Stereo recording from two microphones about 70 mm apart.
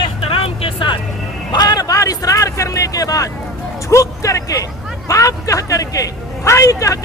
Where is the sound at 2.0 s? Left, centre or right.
Left.